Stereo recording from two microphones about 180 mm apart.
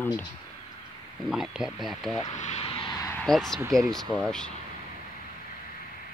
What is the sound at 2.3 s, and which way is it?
Vehicle, 40° left (ahead or behind).